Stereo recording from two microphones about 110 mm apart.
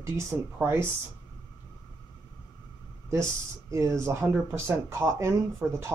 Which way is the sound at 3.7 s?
25° right (ahead or behind).